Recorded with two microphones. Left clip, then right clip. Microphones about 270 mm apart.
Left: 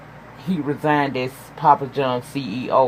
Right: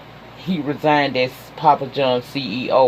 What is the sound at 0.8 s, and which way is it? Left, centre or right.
Speech, left.